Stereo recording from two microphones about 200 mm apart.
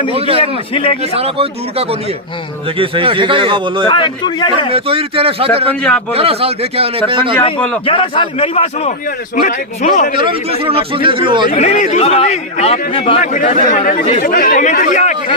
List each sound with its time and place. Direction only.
0.1 s a man's voice: 30° right (ahead or behind)
3.8 s a man's voice: 25° left (ahead or behind)
4.7 s a man's voice: 30° right (ahead or behind)
5.8 s a man's voice: 5° left (ahead or behind)
6.1 s a man's voice: 30° right (ahead or behind)
7.9 s a man's voice: 25° left (ahead or behind)
10.2 s a man's voice: 25° right (ahead or behind)
11.5 s a man's voice: 40° left (ahead or behind)
13.2 s a man's voice: 40° left (ahead or behind)